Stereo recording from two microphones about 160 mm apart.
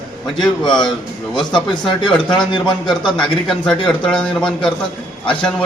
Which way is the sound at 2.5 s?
30° left (ahead or behind).